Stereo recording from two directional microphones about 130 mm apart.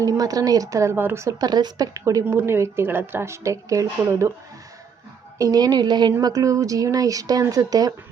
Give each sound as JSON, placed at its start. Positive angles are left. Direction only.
{"t": 0.0, "sound": "speech", "side_deg": -30}
{"t": 5.4, "sound": "a woman's voice", "side_deg": -30}